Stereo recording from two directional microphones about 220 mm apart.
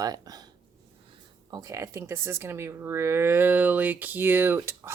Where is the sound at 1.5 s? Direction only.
15° right (ahead or behind).